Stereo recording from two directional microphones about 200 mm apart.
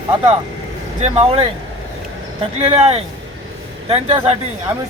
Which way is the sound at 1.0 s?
35° right (ahead or behind).